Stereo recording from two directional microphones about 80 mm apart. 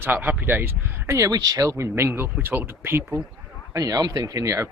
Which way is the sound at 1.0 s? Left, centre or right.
Right.